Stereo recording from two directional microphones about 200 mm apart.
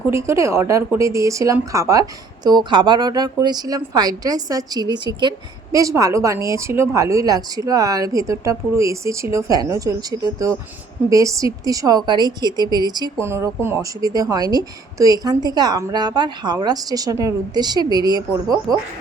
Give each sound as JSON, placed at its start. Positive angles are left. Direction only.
{"t": 0.0, "sound": "a woman's voice", "side_deg": -15}